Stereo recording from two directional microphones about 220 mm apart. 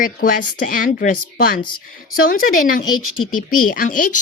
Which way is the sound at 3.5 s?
40° left (ahead or behind).